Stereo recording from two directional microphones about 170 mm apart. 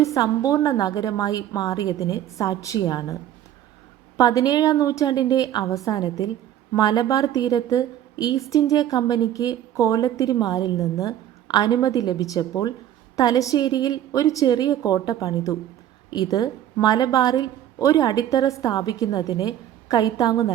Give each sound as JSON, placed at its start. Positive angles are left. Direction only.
{"t": 0.0, "sound": "a woman's voice", "side_deg": 20}
{"t": 4.2, "sound": "a woman's voice", "side_deg": 20}